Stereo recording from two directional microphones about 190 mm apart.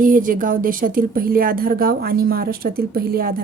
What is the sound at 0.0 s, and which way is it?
Speech, 45° right (ahead or behind).